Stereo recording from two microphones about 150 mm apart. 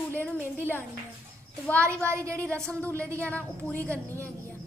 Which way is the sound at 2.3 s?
10° left (ahead or behind).